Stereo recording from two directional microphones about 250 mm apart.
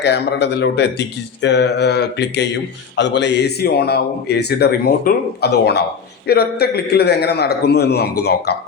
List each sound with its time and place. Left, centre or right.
0.0 s a man's voice: left